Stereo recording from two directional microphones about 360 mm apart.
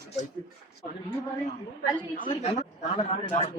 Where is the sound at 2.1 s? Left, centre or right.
Centre.